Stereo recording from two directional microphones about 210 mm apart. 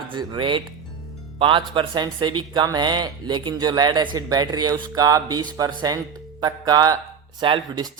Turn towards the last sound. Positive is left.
turn(degrees=-20)  # may be behind; listen again after turning